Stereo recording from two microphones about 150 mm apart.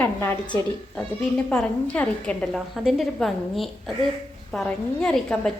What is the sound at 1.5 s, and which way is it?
A woman's voice, 10° left (ahead or behind).